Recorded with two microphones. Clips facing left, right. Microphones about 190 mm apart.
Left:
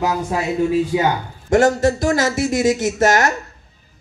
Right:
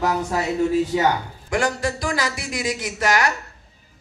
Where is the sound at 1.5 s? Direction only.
45° left (ahead or behind).